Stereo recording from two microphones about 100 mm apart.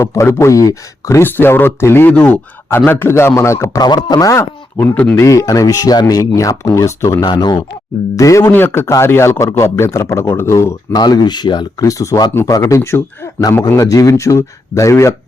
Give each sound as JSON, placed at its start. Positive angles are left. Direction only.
{"t": 0.0, "sound": "speech", "side_deg": 25}
{"t": 3.8, "sound": "speech", "side_deg": 45}
{"t": 7.3, "sound": "speech", "side_deg": 50}
{"t": 8.1, "sound": "speech", "side_deg": 30}
{"t": 10.9, "sound": "speech", "side_deg": 45}
{"t": 11.8, "sound": "speech", "side_deg": 35}